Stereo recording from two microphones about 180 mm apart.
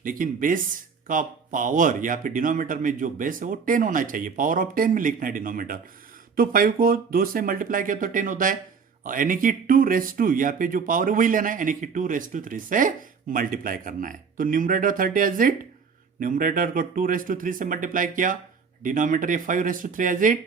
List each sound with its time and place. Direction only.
0.0 s speech: 50° right (ahead or behind)